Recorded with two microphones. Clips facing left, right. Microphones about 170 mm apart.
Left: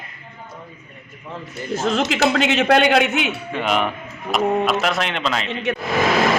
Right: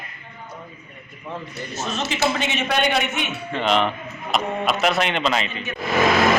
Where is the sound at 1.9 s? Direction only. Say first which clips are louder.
Left 5 dB; 90° left.